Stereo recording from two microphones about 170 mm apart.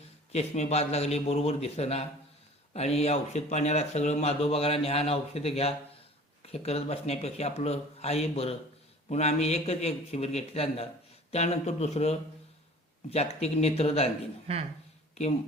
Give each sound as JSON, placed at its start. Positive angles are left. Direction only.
{"t": 0.3, "sound": "speech", "side_deg": 40}
{"t": 14.5, "sound": "speech", "side_deg": -35}